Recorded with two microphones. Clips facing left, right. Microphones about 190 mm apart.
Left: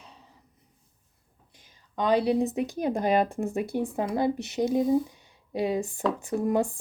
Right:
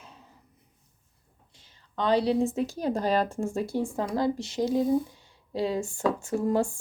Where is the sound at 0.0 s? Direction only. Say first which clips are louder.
Right 1 dB; centre (ahead or behind).